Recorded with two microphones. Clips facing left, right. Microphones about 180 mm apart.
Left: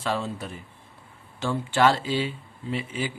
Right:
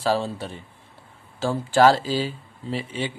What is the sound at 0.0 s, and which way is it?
Speech, 30° right (ahead or behind).